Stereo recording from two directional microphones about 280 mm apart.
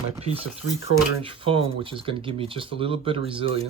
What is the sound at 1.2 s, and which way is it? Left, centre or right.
Speech, centre.